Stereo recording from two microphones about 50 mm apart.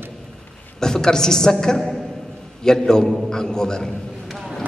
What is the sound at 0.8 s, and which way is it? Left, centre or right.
A man's voice, centre.